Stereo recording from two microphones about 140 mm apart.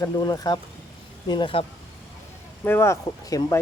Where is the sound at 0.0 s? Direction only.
25° left (ahead or behind).